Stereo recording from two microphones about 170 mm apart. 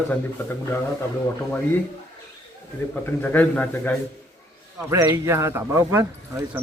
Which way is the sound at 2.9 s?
10° left (ahead or behind).